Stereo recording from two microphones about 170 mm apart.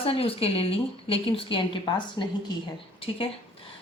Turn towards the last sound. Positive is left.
turn(degrees=35)  # may be behind; listen again after turning